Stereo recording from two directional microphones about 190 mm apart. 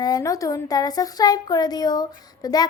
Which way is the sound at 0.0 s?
20° left (ahead or behind).